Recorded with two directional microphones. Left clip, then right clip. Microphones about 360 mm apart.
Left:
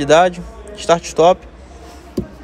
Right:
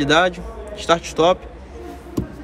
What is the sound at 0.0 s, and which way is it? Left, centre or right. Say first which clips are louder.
A man's voice: left 5 dB; centre.